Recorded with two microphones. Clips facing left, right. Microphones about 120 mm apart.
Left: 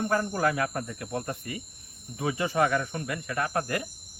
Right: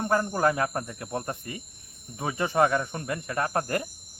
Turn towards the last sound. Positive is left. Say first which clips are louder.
# right 2 dB
turn(degrees=-35)  # may be behind; listen again after turning